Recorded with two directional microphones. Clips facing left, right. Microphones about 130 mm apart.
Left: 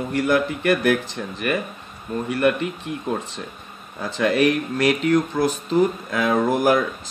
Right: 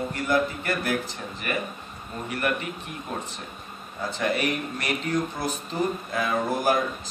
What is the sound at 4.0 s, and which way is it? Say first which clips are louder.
Speech: left 7 dB; 90° left.